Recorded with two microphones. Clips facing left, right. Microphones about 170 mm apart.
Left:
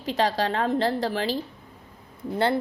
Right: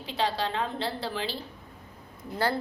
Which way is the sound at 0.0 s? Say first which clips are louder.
Left 5 dB; 45° left (ahead or behind).